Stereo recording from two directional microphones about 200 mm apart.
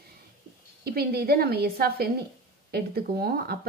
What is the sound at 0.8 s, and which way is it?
Speech, 50° right (ahead or behind).